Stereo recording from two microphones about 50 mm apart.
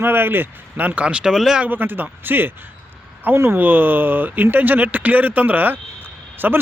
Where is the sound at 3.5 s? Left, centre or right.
Right.